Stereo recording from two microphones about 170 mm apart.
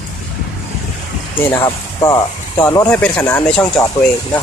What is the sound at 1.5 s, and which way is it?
Speech, 20° left (ahead or behind).